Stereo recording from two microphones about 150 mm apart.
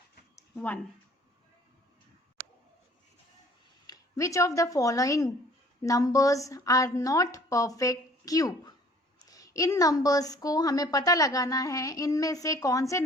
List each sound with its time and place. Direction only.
0.5 s speech: 10° left (ahead or behind)
3.8 s a woman's voice: 20° left (ahead or behind)